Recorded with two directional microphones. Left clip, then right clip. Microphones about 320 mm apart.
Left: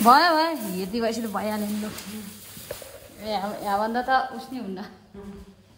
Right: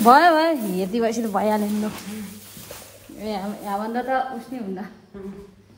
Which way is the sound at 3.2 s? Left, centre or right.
Centre.